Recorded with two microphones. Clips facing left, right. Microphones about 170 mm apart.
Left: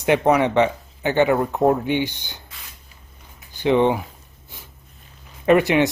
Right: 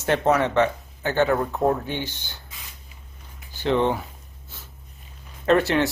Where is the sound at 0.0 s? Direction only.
15° left (ahead or behind).